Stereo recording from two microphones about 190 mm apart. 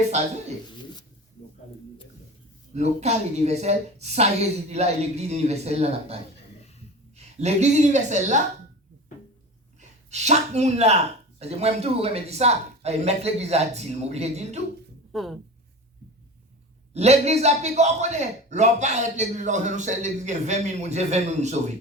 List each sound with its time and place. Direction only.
2.7 s a man's voice: 35° right (ahead or behind)
7.3 s a man's voice: 35° right (ahead or behind)
10.1 s a man's voice: 35° right (ahead or behind)
15.1 s speech: centre (ahead or behind)
16.9 s a man's voice: 35° right (ahead or behind)